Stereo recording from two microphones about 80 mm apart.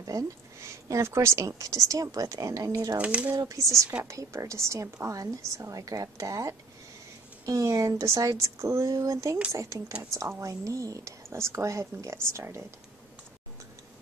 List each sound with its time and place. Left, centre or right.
0.0 s speech: right
3.0 s speech: centre
3.3 s speech: right